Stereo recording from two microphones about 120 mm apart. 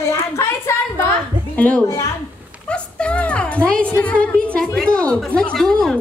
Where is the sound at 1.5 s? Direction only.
10° left (ahead or behind).